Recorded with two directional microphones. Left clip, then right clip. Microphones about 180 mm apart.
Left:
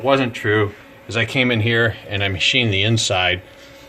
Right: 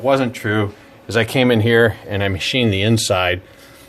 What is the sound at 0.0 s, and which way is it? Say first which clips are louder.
Speech: even; 55° right (ahead or behind).